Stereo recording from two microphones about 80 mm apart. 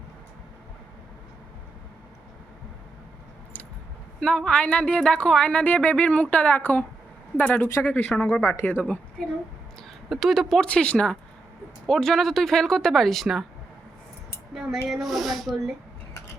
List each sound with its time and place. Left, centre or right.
4.2 s a woman's voice: centre
10.1 s speech: centre
10.7 s speech: centre
14.5 s speech: centre